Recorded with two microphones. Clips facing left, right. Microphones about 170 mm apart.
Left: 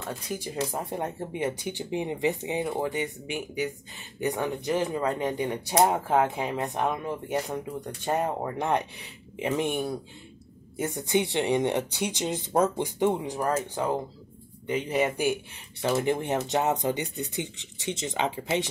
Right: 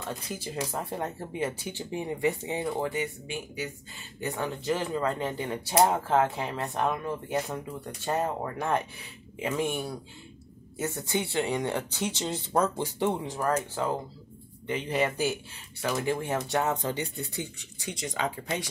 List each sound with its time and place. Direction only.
0.7 s speech: 15° left (ahead or behind)
14.7 s speech: 15° left (ahead or behind)